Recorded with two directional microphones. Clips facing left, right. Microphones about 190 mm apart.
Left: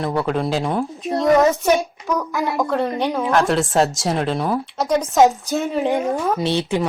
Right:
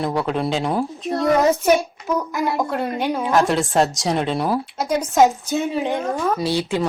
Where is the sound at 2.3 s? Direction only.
5° right (ahead or behind).